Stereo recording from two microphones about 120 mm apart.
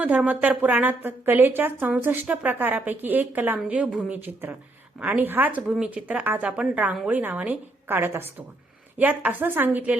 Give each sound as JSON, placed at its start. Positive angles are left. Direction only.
{"t": 0.0, "sound": "a woman's voice", "side_deg": -10}